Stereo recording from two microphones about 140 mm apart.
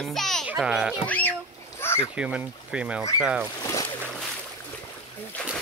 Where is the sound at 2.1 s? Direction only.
5° right (ahead or behind).